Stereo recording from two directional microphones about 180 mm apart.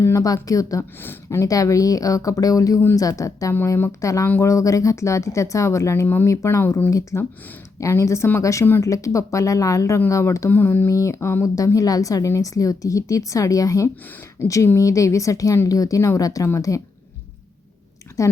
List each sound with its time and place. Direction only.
0.0 s a woman's voice: 15° left (ahead or behind)
18.2 s a woman's voice: 15° left (ahead or behind)